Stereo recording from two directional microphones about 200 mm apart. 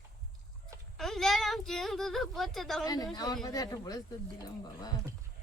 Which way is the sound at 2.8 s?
20° left (ahead or behind).